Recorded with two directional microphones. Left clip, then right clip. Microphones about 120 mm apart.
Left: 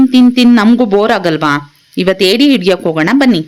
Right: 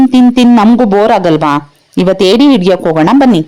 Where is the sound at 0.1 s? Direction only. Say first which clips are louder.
Right 1 dB; 30° right (ahead or behind).